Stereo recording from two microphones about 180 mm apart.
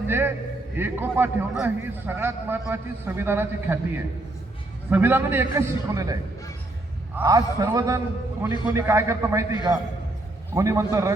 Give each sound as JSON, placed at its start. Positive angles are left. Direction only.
{"t": 0.1, "sound": "a man's voice", "side_deg": -10}
{"t": 7.2, "sound": "a man's voice", "side_deg": -20}